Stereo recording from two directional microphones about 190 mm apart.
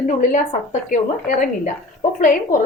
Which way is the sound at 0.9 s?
40° left (ahead or behind).